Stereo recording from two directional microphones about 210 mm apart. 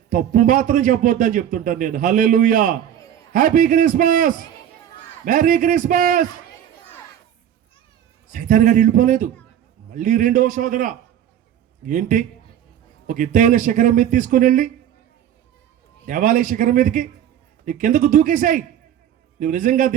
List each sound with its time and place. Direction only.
0.1 s speech: 40° right (ahead or behind)
8.3 s speech: 40° right (ahead or behind)
16.0 s speech: 40° right (ahead or behind)